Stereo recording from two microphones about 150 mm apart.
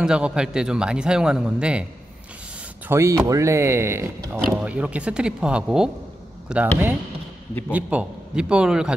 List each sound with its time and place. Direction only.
0.0 s speech: 5° right (ahead or behind)
2.9 s speech: 20° right (ahead or behind)
7.7 s speech: 10° right (ahead or behind)